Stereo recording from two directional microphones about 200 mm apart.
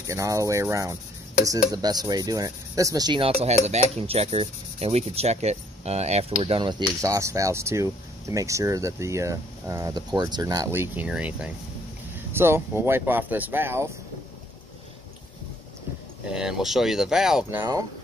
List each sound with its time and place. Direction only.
0.0 s speech: 15° right (ahead or behind)
16.3 s speech: 5° right (ahead or behind)